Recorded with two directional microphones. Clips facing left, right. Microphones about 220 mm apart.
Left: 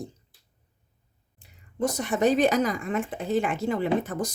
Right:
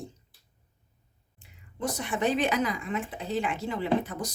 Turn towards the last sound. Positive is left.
turn(degrees=50)  # may be behind; listen again after turning